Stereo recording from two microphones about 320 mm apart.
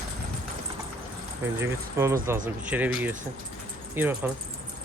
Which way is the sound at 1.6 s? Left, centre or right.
Centre.